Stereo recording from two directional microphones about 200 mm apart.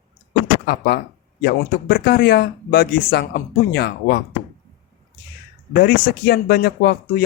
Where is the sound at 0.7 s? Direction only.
55° left (ahead or behind).